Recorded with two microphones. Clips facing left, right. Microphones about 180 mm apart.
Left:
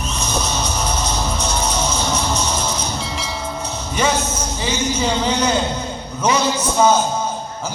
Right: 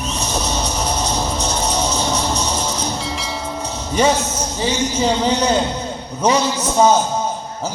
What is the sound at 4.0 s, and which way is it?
A man's voice, 35° right (ahead or behind).